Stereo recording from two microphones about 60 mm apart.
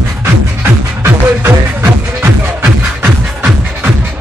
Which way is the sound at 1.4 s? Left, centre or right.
Right.